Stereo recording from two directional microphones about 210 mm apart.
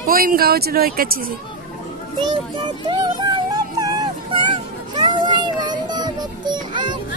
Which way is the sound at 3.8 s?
15° right (ahead or behind).